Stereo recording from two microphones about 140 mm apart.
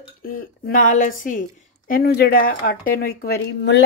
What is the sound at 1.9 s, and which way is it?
Speech, 90° left.